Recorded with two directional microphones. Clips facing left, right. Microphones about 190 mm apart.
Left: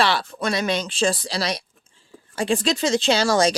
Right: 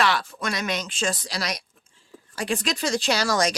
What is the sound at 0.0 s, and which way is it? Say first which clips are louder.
Speech: left 2 dB; 30° left (ahead or behind).